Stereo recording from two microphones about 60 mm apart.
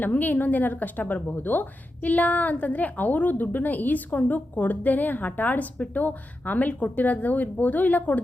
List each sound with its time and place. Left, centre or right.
0.0 s speech: left